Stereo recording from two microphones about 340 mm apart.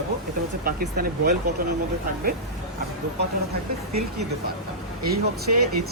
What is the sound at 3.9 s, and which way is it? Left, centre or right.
Speech, right.